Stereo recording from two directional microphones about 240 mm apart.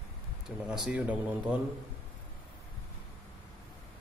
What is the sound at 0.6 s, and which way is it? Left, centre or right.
Speech, centre.